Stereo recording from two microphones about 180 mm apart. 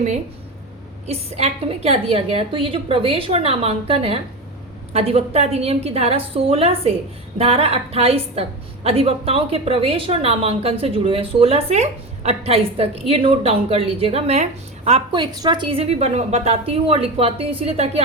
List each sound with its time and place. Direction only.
1.0 s a woman's voice: 35° right (ahead or behind)